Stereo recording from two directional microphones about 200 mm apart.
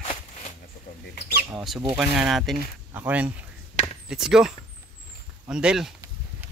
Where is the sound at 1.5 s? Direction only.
Centre (ahead or behind).